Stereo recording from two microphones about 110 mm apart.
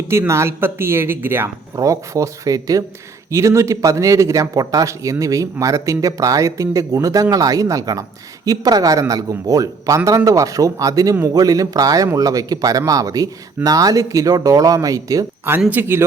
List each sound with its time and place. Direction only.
0.1 s speech: 25° right (ahead or behind)
1.7 s speech: 30° right (ahead or behind)
15.7 s speech: 20° right (ahead or behind)